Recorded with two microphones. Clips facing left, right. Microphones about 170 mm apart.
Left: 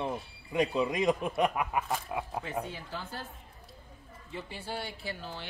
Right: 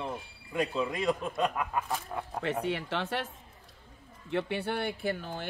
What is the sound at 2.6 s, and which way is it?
Speech, 80° right.